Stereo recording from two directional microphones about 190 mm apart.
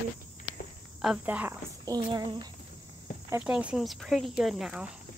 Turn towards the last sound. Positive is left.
turn(degrees=-5)  # may be behind; listen again after turning